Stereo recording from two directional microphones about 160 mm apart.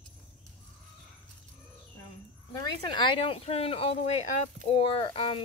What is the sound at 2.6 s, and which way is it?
Speech, 30° left (ahead or behind).